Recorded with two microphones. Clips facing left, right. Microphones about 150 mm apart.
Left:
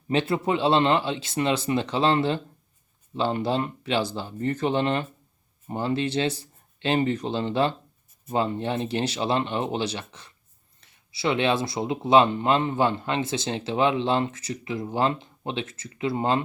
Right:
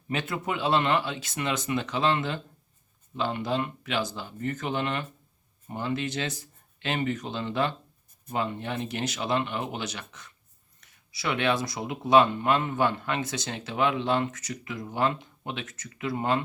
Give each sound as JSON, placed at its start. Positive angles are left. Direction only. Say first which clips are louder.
{"t": 0.1, "sound": "speech", "louder": "left 7 dB", "side_deg": 30}